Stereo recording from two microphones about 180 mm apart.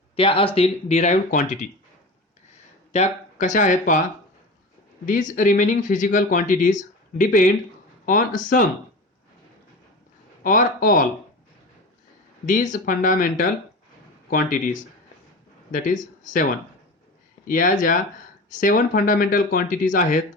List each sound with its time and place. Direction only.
0.2 s speech: 30° left (ahead or behind)
2.9 s speech: 40° left (ahead or behind)
5.0 s speech: 45° left (ahead or behind)
10.4 s speech: 50° left (ahead or behind)
12.5 s speech: 45° left (ahead or behind)